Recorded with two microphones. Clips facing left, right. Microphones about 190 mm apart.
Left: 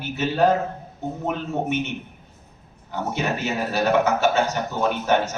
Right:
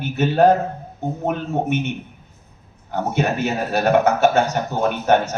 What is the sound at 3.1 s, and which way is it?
A man's voice, 50° right (ahead or behind).